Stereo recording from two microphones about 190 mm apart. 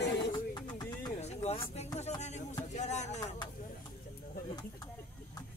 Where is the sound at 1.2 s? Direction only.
35° left (ahead or behind).